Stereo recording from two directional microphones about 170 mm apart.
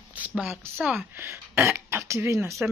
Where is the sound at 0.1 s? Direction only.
10° right (ahead or behind).